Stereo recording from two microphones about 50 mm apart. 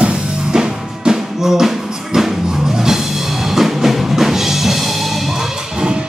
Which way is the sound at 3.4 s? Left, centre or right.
Centre.